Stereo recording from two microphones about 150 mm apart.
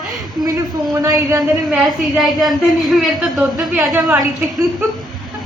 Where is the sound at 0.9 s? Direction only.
20° right (ahead or behind).